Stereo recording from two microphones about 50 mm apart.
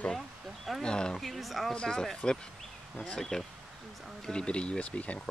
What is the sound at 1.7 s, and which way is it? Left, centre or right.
Speech, centre.